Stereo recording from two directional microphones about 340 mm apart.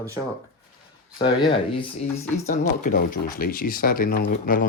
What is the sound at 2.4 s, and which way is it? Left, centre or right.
Speech, left.